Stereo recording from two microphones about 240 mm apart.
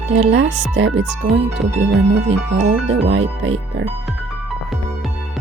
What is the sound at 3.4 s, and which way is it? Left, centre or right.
Speech, right.